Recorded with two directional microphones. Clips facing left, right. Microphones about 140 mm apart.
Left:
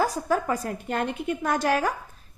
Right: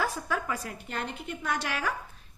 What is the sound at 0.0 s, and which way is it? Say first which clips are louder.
A woman's voice: left 7 dB; 40° left (ahead or behind).